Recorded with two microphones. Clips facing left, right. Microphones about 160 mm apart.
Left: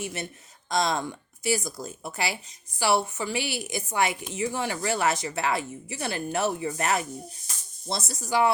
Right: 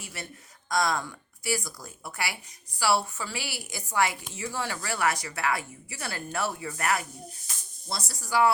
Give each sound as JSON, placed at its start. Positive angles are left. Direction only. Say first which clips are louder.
{"t": 0.0, "sound": "speech", "louder": "left 7 dB", "side_deg": 20}